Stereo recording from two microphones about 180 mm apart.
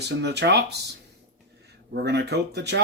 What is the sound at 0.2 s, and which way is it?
Speech, 70° right (ahead or behind).